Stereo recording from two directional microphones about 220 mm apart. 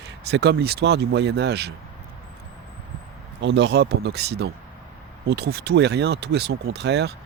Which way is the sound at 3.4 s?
55° right (ahead or behind).